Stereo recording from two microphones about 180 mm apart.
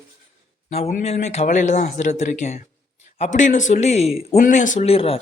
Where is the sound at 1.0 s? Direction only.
35° left (ahead or behind).